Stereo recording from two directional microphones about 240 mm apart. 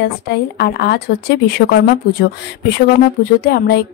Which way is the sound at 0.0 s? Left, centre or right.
Left.